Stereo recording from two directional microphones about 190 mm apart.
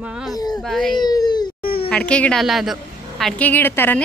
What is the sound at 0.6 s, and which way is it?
Speech, centre (ahead or behind).